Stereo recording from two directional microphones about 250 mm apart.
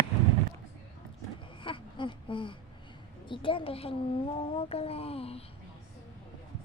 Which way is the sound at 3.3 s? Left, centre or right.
Left.